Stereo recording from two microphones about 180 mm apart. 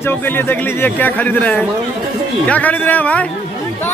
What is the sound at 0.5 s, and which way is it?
Speech, 10° left (ahead or behind).